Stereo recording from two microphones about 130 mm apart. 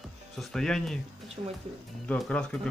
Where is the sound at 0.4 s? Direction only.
5° left (ahead or behind).